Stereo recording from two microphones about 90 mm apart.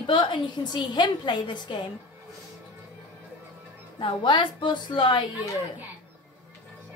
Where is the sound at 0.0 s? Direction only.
65° left (ahead or behind).